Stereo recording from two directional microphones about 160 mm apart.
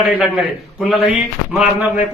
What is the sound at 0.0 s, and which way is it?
Speech, 5° right (ahead or behind).